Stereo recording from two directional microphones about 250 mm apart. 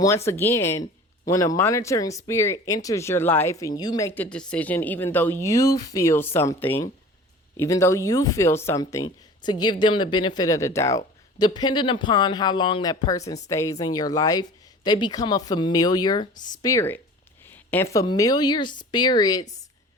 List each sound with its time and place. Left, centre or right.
0.0 s speech: centre